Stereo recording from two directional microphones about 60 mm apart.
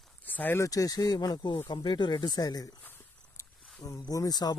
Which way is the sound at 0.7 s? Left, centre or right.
Left.